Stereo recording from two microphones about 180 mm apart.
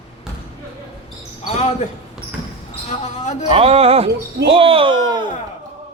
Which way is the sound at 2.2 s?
5° right (ahead or behind).